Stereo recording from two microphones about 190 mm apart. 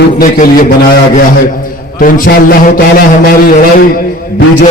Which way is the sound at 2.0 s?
45° left (ahead or behind).